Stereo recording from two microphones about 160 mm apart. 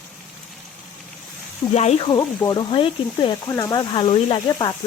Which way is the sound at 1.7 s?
45° left (ahead or behind).